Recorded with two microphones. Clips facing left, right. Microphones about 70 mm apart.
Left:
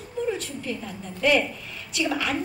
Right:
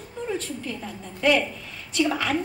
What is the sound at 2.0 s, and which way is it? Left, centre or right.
Speech, right.